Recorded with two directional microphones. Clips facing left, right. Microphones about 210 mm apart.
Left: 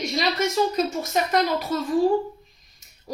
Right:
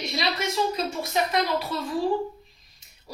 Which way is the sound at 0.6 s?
45° left (ahead or behind).